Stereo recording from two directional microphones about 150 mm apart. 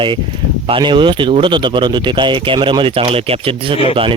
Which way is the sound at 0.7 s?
30° right (ahead or behind).